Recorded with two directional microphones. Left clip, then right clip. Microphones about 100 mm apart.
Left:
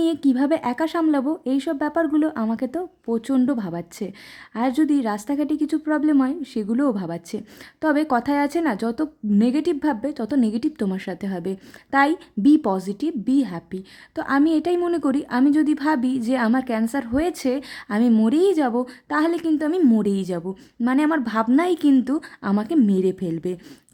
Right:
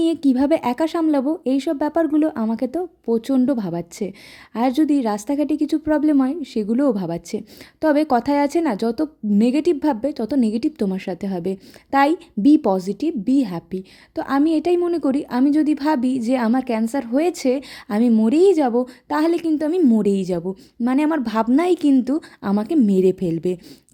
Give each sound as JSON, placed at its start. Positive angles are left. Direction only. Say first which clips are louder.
{"t": 0.0, "sound": "a woman's voice", "louder": "right 2 dB", "side_deg": -25}